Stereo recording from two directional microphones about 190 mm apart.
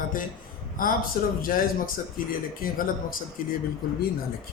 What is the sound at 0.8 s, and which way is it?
Speech, 45° left (ahead or behind).